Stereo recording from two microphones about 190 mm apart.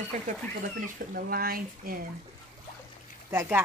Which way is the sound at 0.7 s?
50° right (ahead or behind).